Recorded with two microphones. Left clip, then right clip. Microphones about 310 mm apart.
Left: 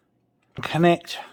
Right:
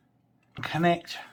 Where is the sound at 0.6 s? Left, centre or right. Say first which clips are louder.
Left 5 dB; left.